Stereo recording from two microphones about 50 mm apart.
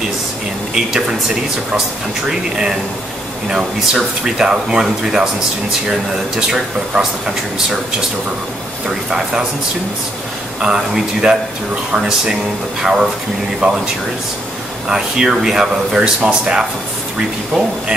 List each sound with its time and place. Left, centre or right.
0.7 s speech: centre
8.8 s speech: centre
10.6 s speech: centre
14.9 s speech: centre